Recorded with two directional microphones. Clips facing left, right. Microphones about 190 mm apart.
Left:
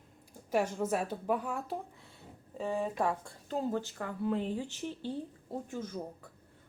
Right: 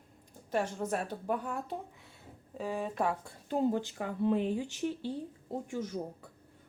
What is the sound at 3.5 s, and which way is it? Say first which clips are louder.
A woman's voice: right 3 dB; 15° right (ahead or behind).